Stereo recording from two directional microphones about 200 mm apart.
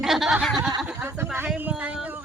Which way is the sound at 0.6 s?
15° right (ahead or behind).